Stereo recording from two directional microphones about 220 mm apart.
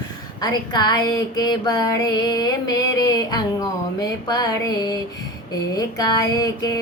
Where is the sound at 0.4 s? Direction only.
20° left (ahead or behind).